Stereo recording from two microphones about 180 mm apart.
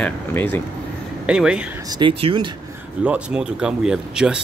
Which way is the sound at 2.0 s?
30° right (ahead or behind).